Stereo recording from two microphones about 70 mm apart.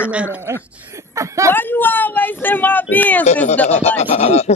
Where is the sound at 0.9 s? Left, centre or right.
Right.